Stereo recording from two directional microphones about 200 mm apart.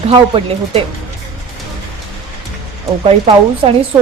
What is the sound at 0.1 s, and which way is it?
Speech, 25° right (ahead or behind).